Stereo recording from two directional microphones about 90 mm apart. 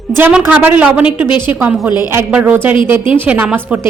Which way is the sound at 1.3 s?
60° left (ahead or behind).